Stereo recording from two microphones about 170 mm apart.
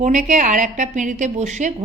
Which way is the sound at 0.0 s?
45° right (ahead or behind).